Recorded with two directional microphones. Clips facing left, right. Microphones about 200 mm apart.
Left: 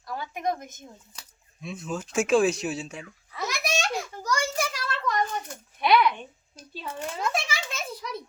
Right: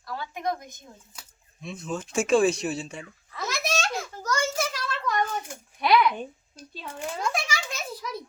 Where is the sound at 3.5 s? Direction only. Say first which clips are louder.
Even; 15° left (ahead or behind).